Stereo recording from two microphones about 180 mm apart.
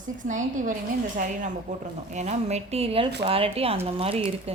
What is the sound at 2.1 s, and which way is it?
A woman's voice, 40° right (ahead or behind).